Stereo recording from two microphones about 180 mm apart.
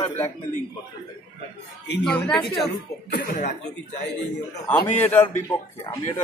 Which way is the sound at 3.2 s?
45° left (ahead or behind).